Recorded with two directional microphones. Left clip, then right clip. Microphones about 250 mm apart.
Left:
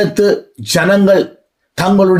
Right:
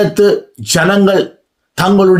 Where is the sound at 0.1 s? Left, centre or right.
Centre.